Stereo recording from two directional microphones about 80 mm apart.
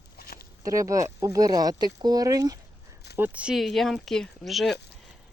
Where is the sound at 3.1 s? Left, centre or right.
Right.